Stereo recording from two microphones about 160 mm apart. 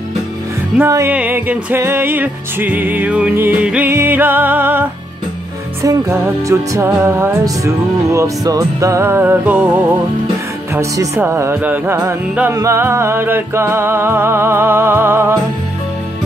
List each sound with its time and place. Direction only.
0.7 s music: 15° right (ahead or behind)
10.7 s music: 15° right (ahead or behind)